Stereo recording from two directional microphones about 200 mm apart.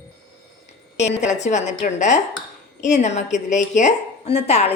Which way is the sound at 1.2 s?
35° left (ahead or behind).